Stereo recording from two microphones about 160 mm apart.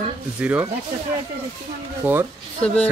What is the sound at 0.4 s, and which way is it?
Speech, 10° right (ahead or behind).